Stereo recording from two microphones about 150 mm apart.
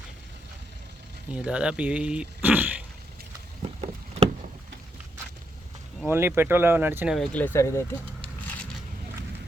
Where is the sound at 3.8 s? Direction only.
45° right (ahead or behind).